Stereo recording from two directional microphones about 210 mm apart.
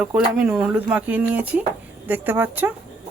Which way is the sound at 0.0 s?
5° right (ahead or behind).